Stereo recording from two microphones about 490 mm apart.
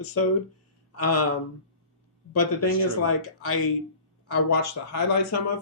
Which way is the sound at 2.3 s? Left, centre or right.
Left.